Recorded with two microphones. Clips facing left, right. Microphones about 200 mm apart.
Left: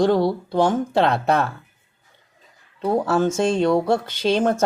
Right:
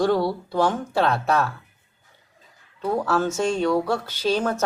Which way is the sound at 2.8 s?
30° left (ahead or behind).